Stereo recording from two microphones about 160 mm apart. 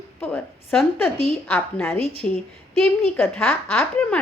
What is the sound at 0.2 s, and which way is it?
A woman's voice, 10° left (ahead or behind).